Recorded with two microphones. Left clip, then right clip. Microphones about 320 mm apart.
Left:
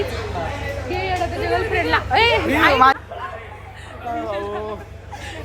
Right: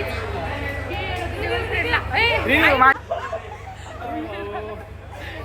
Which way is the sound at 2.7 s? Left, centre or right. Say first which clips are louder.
Left 2 dB; centre.